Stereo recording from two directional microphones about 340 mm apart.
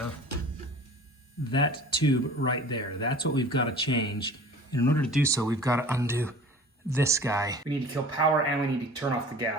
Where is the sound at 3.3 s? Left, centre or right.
Centre.